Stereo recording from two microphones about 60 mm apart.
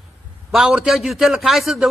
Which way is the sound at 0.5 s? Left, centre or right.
Centre.